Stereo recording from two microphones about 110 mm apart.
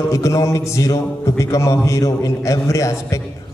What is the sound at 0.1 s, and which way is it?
A man's voice, 30° left (ahead or behind).